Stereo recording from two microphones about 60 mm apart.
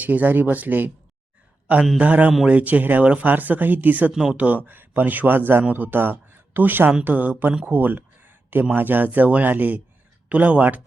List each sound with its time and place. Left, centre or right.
0.0 s a man's voice: right
4.1 s speech: centre
4.4 s a man's voice: right
7.7 s a sound: right
8.7 s speech: right